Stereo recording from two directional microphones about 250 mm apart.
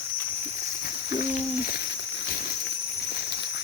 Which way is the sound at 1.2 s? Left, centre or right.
Left.